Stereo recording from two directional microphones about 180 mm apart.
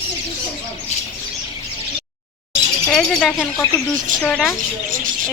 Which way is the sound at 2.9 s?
5° left (ahead or behind).